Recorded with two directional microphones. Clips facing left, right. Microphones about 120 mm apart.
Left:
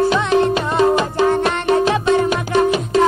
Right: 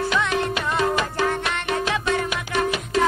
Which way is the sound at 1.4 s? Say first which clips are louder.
Left 9 dB; 35° left (ahead or behind).